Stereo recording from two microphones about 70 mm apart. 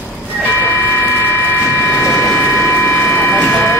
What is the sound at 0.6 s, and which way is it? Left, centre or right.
Vehicle, left.